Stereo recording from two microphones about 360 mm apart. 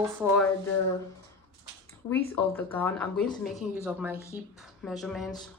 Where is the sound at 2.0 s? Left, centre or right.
Centre.